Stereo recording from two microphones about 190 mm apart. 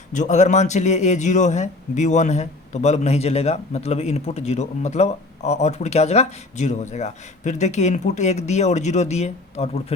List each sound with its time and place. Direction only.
0.1 s a man's voice: 40° left (ahead or behind)